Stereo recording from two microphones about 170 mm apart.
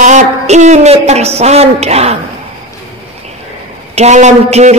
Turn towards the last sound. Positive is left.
turn(degrees=-40)  # may be behind; listen again after turning